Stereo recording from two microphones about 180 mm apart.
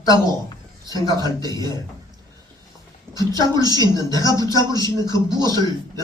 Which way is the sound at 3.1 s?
20° right (ahead or behind).